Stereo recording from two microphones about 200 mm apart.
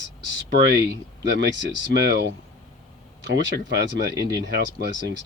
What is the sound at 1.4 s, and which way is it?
Speech, 60° right (ahead or behind).